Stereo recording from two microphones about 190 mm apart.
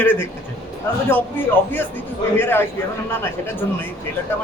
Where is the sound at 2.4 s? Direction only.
10° left (ahead or behind).